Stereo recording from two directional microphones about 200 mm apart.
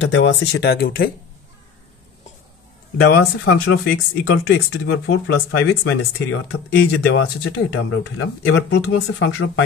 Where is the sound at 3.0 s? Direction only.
55° left (ahead or behind); by 6.6 s 75° left (ahead or behind).